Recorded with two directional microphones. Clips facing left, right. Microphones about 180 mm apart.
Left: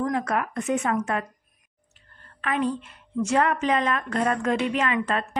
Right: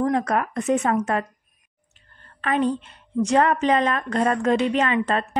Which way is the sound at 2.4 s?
35° right (ahead or behind).